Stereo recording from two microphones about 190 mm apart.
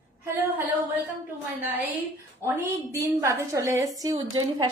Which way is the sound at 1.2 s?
10° right (ahead or behind).